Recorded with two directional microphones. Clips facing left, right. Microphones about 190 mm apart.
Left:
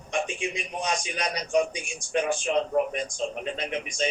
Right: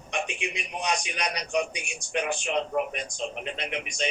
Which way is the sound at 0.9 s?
30° left (ahead or behind).